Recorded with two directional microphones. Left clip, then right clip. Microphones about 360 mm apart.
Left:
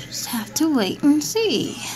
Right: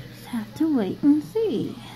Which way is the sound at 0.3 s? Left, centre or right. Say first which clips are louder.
Left 3 dB; left.